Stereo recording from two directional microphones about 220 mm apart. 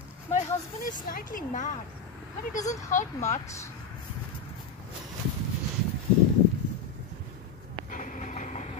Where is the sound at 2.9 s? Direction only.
35° left (ahead or behind).